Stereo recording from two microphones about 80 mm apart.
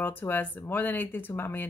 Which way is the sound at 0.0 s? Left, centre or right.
Left.